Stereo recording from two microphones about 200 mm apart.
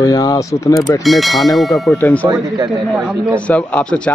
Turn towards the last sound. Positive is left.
turn(degrees=5)  # may be behind; listen again after turning